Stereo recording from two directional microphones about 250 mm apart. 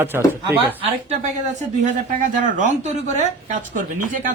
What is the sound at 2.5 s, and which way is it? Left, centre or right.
Speech, right.